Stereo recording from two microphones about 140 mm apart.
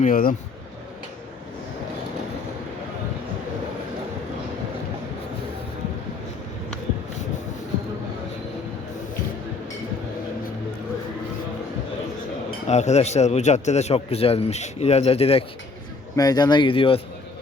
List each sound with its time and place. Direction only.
0.0 s speech: 85° left
12.6 s a man's voice: 55° left (ahead or behind)
16.1 s a man's voice: 30° left (ahead or behind)